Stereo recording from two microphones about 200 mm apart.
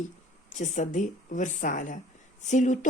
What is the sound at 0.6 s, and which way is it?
Speech, 35° left (ahead or behind).